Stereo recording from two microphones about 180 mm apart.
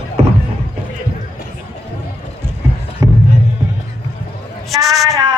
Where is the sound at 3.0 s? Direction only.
20° right (ahead or behind).